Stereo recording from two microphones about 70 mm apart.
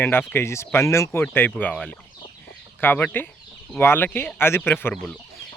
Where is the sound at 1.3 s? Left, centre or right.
Left.